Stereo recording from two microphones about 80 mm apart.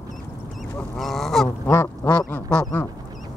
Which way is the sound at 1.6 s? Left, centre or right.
Left.